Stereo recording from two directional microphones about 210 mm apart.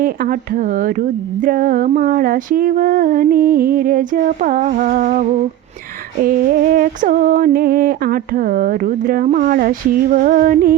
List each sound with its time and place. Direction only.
0.0 s speech: 45° right (ahead or behind)
6.2 s speech: 40° right (ahead or behind)